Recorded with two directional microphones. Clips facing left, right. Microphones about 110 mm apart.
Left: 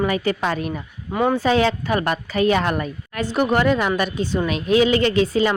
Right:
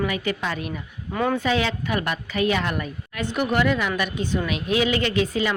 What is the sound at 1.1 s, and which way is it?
A woman's voice, 25° left (ahead or behind).